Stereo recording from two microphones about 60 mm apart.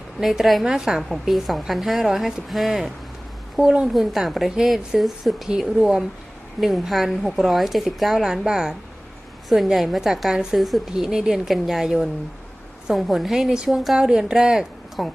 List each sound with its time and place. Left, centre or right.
0.2 s a woman's voice: centre
3.6 s a woman's voice: centre
3.8 s a woman's voice: centre